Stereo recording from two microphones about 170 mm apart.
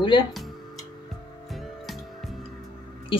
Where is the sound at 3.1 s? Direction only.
30° left (ahead or behind).